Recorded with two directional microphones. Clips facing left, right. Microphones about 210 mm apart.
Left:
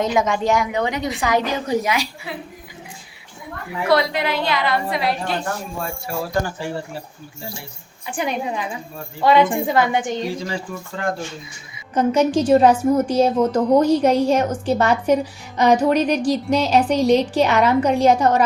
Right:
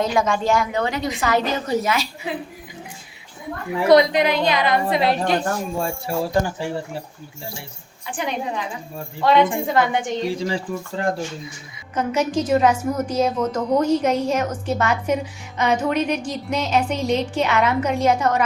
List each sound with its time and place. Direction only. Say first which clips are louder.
0.0 s a woman's voice: left 1 dB; 20° left (ahead or behind)
3.8 s a woman's voice: right 4 dB; 20° right (ahead or behind)
8.1 s a woman's voice: left 2 dB; 10° left (ahead or behind)
10.3 s speech: right 3 dB; 30° right (ahead or behind)
11.9 s a woman's voice: left 4 dB; 30° left (ahead or behind)